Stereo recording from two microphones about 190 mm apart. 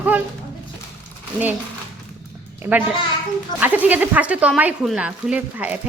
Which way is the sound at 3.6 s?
10° right (ahead or behind).